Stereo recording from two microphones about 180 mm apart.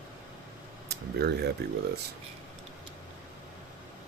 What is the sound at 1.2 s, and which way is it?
Speech, 65° right (ahead or behind).